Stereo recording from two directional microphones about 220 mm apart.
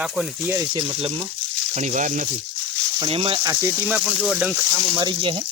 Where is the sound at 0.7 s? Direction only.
20° right (ahead or behind).